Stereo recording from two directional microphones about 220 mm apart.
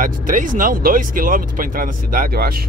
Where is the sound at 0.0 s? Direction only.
35° right (ahead or behind).